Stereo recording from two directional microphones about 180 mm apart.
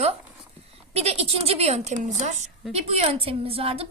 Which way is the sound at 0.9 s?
35° right (ahead or behind).